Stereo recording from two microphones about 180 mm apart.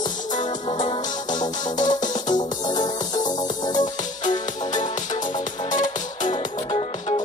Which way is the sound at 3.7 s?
45° left (ahead or behind).